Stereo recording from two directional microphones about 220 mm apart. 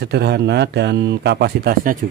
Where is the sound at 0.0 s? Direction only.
50° right (ahead or behind).